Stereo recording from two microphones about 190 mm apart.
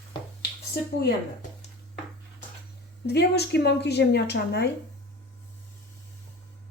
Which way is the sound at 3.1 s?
60° left (ahead or behind).